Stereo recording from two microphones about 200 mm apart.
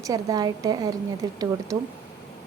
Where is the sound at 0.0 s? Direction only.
15° right (ahead or behind).